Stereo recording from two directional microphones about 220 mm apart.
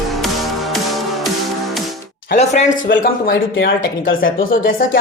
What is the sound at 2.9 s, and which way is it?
A woman's voice, 45° left (ahead or behind).